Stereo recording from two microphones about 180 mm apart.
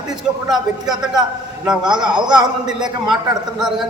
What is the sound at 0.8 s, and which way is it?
A man's voice, 20° right (ahead or behind).